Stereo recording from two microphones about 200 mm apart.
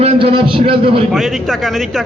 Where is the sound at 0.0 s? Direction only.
30° right (ahead or behind).